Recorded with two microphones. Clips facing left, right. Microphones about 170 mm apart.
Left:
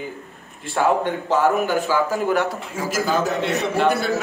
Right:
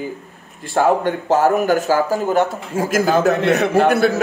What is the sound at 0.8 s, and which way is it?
A man's voice, 50° right (ahead or behind).